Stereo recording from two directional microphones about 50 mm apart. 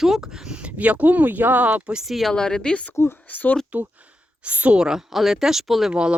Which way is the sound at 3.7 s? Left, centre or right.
Right.